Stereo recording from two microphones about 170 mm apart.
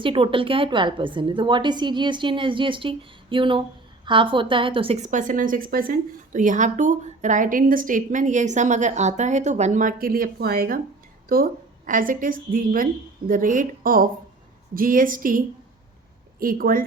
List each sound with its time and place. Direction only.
0.0 s a woman's voice: 30° right (ahead or behind); by 16.8 s 60° right (ahead or behind)